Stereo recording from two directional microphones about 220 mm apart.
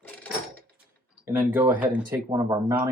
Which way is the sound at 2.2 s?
20° right (ahead or behind).